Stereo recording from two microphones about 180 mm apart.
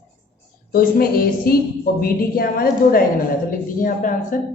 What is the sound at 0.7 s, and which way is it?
A woman's voice, 55° left (ahead or behind).